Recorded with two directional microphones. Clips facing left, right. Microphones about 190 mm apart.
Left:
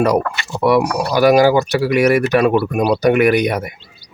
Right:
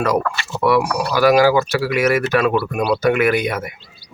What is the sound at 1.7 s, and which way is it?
Speech, 15° left (ahead or behind).